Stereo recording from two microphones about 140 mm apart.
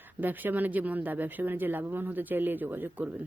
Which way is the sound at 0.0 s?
15° right (ahead or behind).